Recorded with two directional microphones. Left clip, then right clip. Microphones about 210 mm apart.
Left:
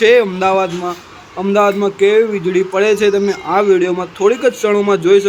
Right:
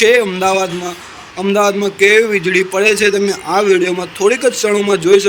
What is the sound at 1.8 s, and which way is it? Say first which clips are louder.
A man's voice: right 1 dB; 50° right (ahead or behind).